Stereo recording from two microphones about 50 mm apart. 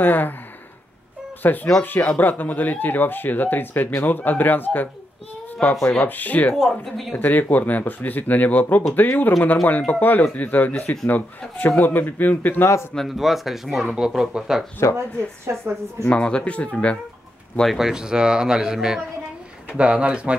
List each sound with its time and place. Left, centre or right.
0.0 s speech: left
1.4 s speech: left
5.9 s speech: left
6.5 s speech: centre
7.2 s speech: left
13.1 s speech: centre
14.8 s speech: left
15.5 s speech: right
16.1 s speech: left
17.6 s speech: centre